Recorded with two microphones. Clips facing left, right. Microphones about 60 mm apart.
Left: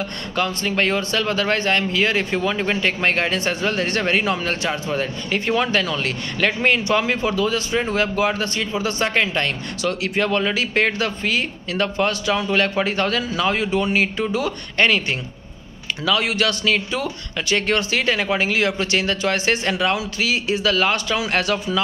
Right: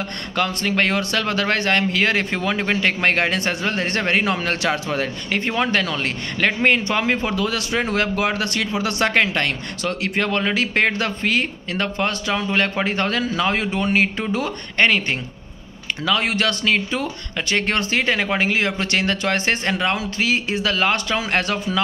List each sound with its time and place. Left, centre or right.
0.4 s a man's voice: right
7.3 s a man's voice: right
14.8 s speech: right